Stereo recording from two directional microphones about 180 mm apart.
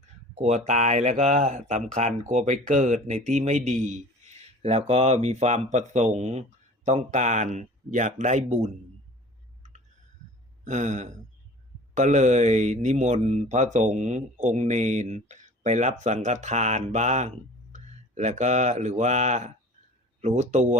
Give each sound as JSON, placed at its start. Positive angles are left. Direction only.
{"t": 0.3, "sound": "speech", "side_deg": -40}
{"t": 10.6, "sound": "a sound", "side_deg": -40}
{"t": 11.9, "sound": "speech", "side_deg": -40}